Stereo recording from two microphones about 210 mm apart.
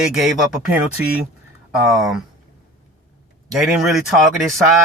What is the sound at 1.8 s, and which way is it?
Speech, centre (ahead or behind).